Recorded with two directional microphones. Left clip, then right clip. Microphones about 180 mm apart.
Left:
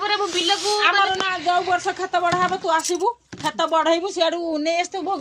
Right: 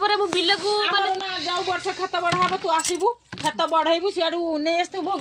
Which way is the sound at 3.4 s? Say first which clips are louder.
Left 2 dB; 30° left (ahead or behind).